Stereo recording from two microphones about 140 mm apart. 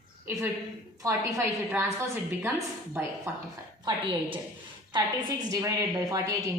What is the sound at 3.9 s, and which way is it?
Speech, 30° right (ahead or behind).